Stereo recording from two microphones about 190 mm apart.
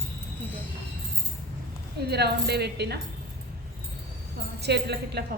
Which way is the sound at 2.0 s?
60° right (ahead or behind).